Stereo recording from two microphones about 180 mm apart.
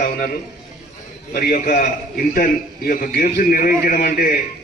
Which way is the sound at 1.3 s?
55° left (ahead or behind).